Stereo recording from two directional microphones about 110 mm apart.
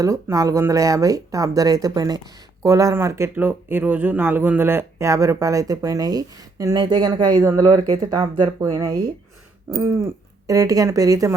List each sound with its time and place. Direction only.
0.0 s speech: 30° right (ahead or behind)
6.7 s speech: 40° right (ahead or behind)